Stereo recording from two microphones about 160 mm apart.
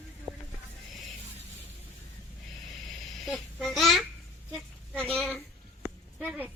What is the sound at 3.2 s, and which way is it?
Babbling, centre (ahead or behind).